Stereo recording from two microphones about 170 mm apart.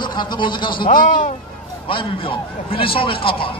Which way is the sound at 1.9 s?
30° left (ahead or behind).